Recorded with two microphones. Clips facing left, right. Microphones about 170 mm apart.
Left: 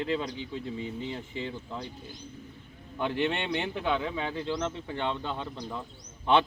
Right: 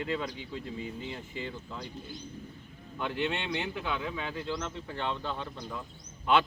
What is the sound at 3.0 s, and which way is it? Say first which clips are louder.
Speech: left 3 dB; 20° left (ahead or behind).